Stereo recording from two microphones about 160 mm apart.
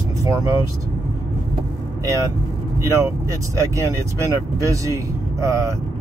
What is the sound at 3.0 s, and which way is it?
Speech, 20° right (ahead or behind).